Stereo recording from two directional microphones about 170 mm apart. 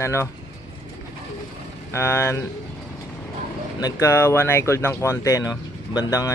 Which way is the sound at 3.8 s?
15° left (ahead or behind).